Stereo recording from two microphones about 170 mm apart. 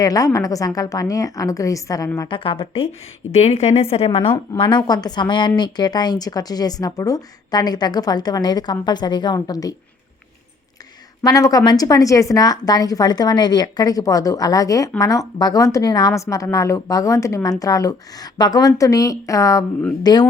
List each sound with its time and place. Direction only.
0.0 s a woman's voice: 20° left (ahead or behind)
11.2 s a woman's voice: 20° left (ahead or behind)